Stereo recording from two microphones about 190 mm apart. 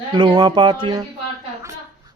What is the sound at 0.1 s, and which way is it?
Speech, 25° right (ahead or behind).